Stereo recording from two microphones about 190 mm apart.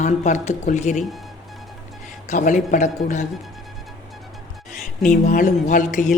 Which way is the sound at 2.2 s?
40° left (ahead or behind).